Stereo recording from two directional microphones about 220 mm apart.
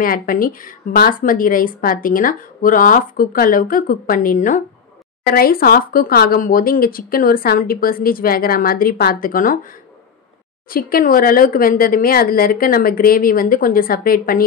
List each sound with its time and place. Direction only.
0.0 s speech: 40° left (ahead or behind)
10.7 s speech: 40° left (ahead or behind)